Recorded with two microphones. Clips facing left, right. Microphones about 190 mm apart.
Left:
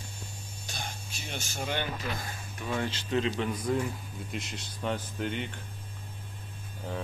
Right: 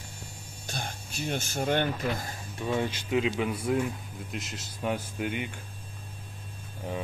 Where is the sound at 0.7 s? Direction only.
50° right (ahead or behind).